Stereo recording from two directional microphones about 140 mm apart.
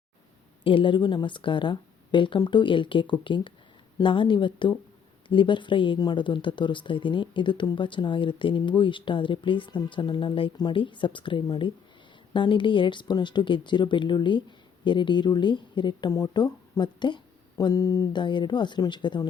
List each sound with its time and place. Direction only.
0.6 s speech: 40° left (ahead or behind)